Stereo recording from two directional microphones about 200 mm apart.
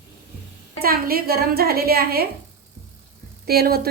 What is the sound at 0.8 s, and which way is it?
A woman's voice, 50° right (ahead or behind).